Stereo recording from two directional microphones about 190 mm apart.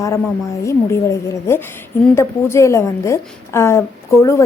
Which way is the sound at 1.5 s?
15° left (ahead or behind).